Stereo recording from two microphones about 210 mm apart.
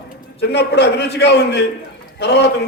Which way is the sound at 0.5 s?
55° left (ahead or behind).